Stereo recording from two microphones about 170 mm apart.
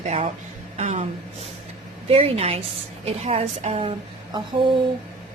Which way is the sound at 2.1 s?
35° right (ahead or behind).